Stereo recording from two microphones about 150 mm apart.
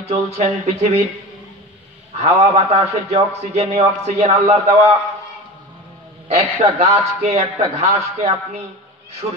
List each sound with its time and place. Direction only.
0.4 s a man's voice: 45° right (ahead or behind)
2.2 s a man's voice: 45° right (ahead or behind)
6.2 s a man's voice: 45° right (ahead or behind)
9.2 s a man's voice: 30° right (ahead or behind)